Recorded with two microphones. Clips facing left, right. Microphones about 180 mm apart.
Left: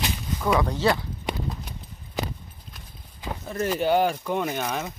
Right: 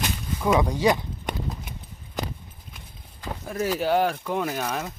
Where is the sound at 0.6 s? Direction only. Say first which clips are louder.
Right 1 dB; 15° right (ahead or behind).